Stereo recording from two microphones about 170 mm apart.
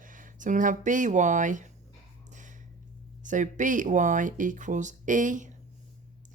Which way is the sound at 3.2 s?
45° right (ahead or behind).